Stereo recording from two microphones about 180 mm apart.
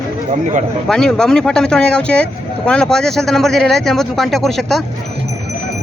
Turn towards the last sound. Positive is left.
turn(degrees=0)  # may be behind; listen again after turning